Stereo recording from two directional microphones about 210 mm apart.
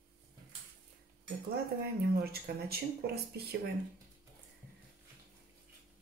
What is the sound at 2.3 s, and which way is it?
Speech, 45° right (ahead or behind).